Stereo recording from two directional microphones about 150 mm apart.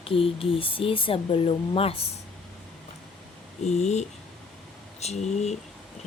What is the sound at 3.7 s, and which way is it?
Speech, 50° left (ahead or behind).